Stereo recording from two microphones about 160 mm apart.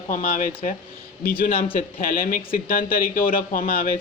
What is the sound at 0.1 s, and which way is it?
Speech, 60° left (ahead or behind).